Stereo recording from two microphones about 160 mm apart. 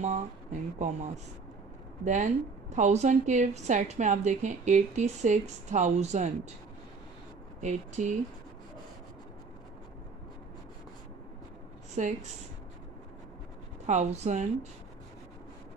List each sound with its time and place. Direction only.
0.0 s a woman's voice: 45° right (ahead or behind)
7.6 s a woman's voice: 45° right (ahead or behind)
11.9 s speech: 45° right (ahead or behind)
13.8 s a woman's voice: 45° right (ahead or behind)